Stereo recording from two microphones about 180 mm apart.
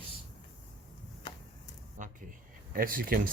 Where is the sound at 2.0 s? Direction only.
45° right (ahead or behind).